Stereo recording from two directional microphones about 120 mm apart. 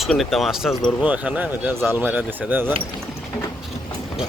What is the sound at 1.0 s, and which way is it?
Speech, 10° right (ahead or behind).